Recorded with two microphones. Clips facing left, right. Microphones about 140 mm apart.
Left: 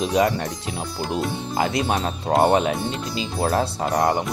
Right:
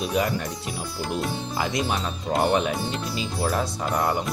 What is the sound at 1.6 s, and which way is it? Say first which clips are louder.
Speech: left 4 dB; 50° left (ahead or behind).